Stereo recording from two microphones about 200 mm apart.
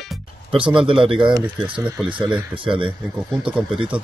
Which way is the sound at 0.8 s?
25° right (ahead or behind).